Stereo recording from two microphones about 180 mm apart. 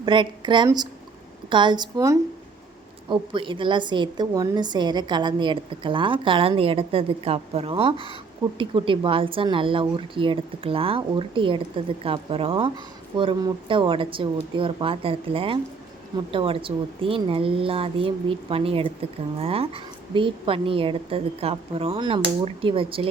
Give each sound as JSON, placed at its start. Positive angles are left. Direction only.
{"t": 0.0, "sound": "a woman's voice", "side_deg": -25}